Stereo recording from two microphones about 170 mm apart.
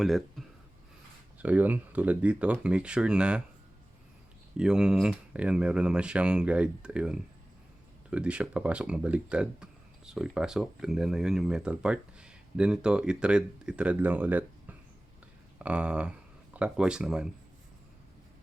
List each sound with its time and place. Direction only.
0.0 s speech: centre (ahead or behind)
4.5 s speech: 5° right (ahead or behind)